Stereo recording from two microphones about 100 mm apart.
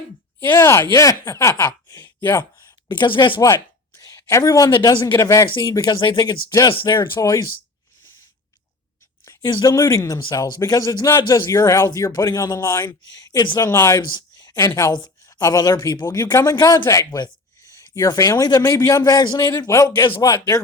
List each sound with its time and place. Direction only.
0.5 s speech: 30° left (ahead or behind)
2.0 s a sound: 30° left (ahead or behind)
2.9 s speech: 50° left (ahead or behind)
3.4 s a sound: 35° left (ahead or behind)
4.4 s speech: 40° left (ahead or behind)
7.2 s speech: 40° left (ahead or behind)
9.2 s speech: 45° left (ahead or behind)
14.1 s a sound: 40° left (ahead or behind)
14.8 s speech: 45° left (ahead or behind)